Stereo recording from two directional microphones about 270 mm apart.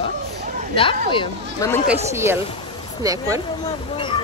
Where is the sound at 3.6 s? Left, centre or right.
Centre.